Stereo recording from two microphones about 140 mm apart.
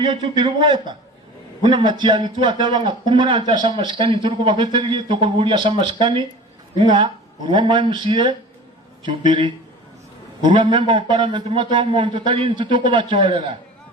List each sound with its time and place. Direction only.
0.0 s a man's voice: 35° right (ahead or behind)